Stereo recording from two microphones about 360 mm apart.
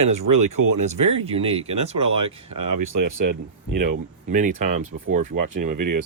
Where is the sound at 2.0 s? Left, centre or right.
Right.